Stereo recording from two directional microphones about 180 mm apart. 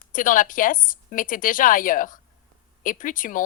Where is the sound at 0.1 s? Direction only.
45° left (ahead or behind).